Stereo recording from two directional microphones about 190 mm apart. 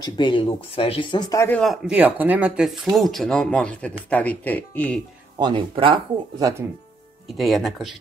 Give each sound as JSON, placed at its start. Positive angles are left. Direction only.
{"t": 0.0, "sound": "speech", "side_deg": 25}
{"t": 1.6, "sound": "speech", "side_deg": -5}
{"t": 5.4, "sound": "speech", "side_deg": -25}
{"t": 7.3, "sound": "speech", "side_deg": 0}